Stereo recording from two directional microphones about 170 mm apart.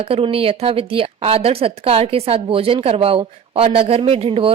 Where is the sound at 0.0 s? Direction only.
35° right (ahead or behind).